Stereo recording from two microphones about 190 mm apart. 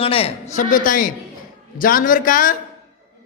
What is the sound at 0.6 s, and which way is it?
Speech, 45° left (ahead or behind).